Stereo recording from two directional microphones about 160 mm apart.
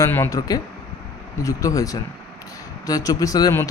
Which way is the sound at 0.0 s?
20° left (ahead or behind).